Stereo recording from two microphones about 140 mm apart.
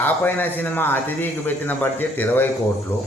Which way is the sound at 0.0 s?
15° left (ahead or behind).